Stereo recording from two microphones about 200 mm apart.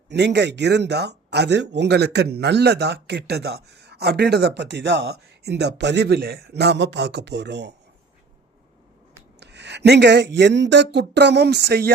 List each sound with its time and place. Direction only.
0.1 s speech: 60° right (ahead or behind)
9.4 s speech: 60° right (ahead or behind)